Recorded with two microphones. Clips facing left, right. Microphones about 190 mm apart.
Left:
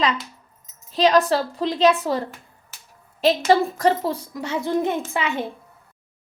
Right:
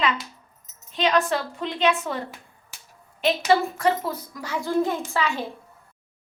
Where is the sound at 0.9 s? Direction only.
35° left (ahead or behind); by 5.4 s 20° left (ahead or behind).